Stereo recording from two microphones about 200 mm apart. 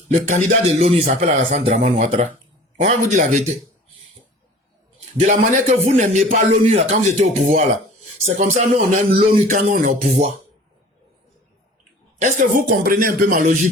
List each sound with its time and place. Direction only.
0.1 s a man's voice: 40° right (ahead or behind)
5.2 s a man's voice: 40° right (ahead or behind)
8.4 s a man's voice: 35° right (ahead or behind)
12.2 s speech: 40° right (ahead or behind)